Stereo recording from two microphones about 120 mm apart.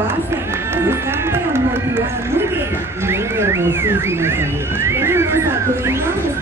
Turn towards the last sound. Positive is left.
turn(degrees=-20)  # may be behind; listen again after turning